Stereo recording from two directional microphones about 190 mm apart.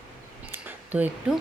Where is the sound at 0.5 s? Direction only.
10° right (ahead or behind).